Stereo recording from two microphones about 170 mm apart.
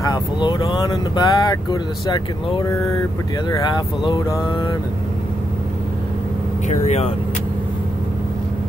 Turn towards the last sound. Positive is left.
turn(degrees=40)  # may be behind; listen again after turning